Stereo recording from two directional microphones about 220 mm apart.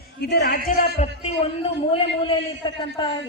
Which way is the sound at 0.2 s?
45° left (ahead or behind).